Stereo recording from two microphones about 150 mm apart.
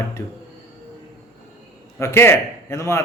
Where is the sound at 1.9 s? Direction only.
15° left (ahead or behind).